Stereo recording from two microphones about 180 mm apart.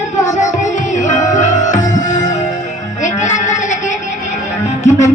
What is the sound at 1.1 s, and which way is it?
Music, 40° left (ahead or behind).